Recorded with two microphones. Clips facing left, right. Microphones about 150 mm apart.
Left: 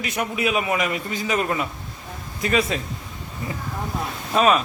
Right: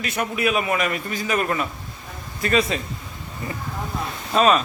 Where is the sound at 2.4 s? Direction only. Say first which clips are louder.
Right 1 dB; 10° left (ahead or behind).